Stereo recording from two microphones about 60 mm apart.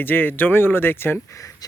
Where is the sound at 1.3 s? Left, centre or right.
Left.